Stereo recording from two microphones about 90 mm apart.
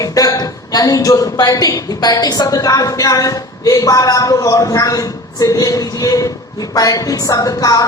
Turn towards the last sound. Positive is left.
turn(degrees=40)  # may be behind; listen again after turning